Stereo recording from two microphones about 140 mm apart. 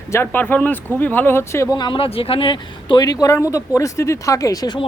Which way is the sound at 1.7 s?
35° left (ahead or behind).